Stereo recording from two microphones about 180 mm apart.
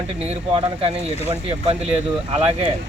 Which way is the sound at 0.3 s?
30° right (ahead or behind).